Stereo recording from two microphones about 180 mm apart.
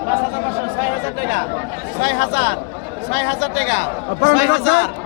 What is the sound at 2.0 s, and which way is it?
Speech, 80° left.